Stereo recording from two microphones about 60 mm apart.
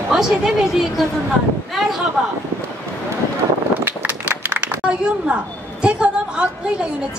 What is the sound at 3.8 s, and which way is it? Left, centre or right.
Run, right.